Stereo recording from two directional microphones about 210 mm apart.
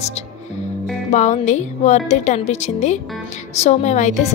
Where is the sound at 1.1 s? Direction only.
35° left (ahead or behind).